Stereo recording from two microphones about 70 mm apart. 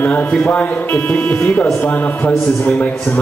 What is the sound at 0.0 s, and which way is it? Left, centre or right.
A man's voice, left.